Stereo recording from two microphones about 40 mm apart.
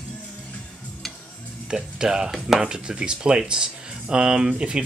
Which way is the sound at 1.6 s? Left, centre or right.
Centre.